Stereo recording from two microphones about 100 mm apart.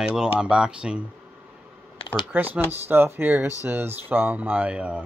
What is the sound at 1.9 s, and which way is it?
Computer keyboard, 60° left (ahead or behind).